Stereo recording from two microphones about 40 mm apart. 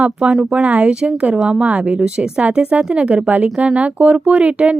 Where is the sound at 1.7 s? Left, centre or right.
Right.